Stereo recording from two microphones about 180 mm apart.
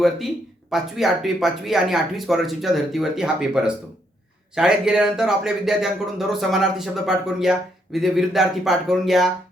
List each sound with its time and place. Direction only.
0.7 s speech: centre (ahead or behind)